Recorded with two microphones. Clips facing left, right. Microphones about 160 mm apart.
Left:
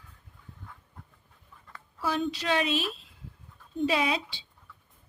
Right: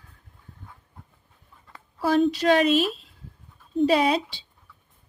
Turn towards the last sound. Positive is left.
turn(degrees=-40)  # may be behind; listen again after turning